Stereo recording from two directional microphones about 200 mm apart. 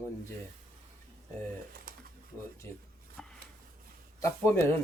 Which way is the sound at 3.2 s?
5° left (ahead or behind).